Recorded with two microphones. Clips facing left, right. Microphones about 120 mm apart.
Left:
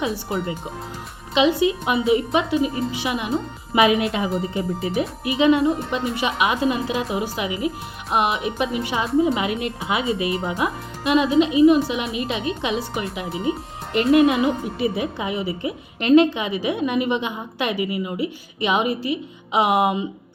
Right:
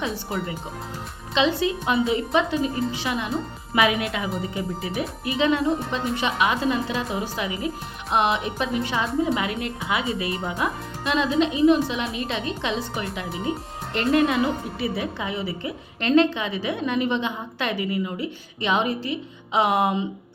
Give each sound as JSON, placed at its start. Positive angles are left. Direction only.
{"t": 0.0, "sound": "speech", "side_deg": 0}
{"t": 1.3, "sound": "a woman's voice", "side_deg": 15}
{"t": 3.8, "sound": "speech", "side_deg": 25}
{"t": 5.2, "sound": "a woman's voice", "side_deg": 10}